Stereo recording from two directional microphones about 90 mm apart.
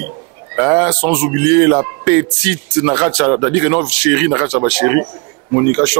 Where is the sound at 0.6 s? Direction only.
15° right (ahead or behind).